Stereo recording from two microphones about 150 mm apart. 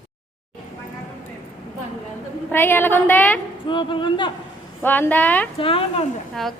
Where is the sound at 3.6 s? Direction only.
30° left (ahead or behind).